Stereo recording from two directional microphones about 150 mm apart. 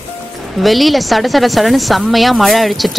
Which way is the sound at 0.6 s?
Centre (ahead or behind).